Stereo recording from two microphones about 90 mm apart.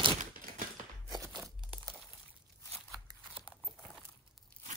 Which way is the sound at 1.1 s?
45° right (ahead or behind).